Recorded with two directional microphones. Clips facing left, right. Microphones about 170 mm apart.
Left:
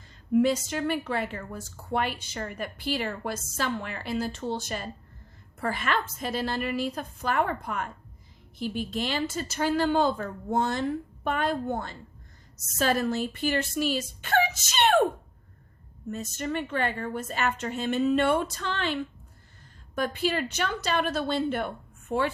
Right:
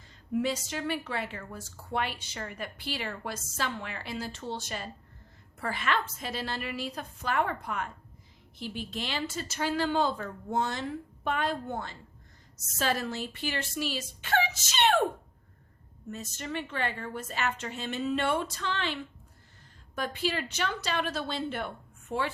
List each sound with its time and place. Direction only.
0.3 s speech: 50° left (ahead or behind)
16.4 s speech: 50° left (ahead or behind)
20.0 s a woman's voice: 50° left (ahead or behind)